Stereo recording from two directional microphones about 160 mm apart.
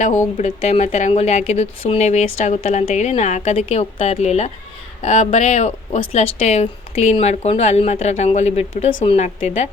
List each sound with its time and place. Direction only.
0.3 s speech: 45° left (ahead or behind)